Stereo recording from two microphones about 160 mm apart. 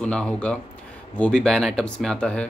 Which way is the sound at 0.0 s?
5° left (ahead or behind).